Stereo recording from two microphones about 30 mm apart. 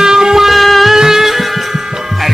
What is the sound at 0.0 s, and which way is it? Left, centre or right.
Music, centre.